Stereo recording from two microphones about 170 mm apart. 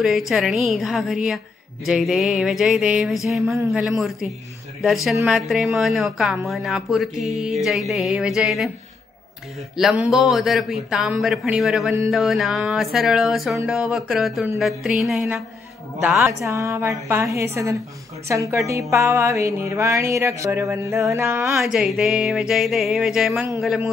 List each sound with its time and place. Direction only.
0.0 s speech: centre (ahead or behind)
4.8 s speech: centre (ahead or behind)
9.8 s a woman's voice: centre (ahead or behind)
21.5 s speech: 5° right (ahead or behind)